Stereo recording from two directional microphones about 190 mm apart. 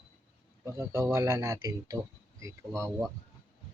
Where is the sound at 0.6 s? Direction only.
15° right (ahead or behind).